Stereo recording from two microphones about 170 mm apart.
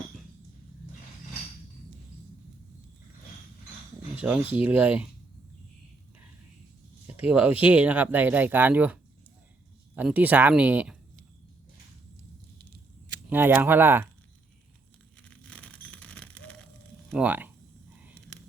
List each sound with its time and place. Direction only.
4.1 s speech: 10° right (ahead or behind)
7.2 s speech: 10° right (ahead or behind)
13.3 s speech: 10° right (ahead or behind)
15.2 s bicycle: 5° left (ahead or behind)
17.2 s speech: 10° right (ahead or behind)